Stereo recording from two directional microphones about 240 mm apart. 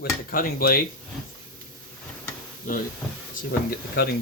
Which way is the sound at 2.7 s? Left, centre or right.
Left.